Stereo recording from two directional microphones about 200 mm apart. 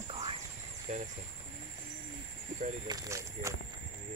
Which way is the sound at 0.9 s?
40° right (ahead or behind).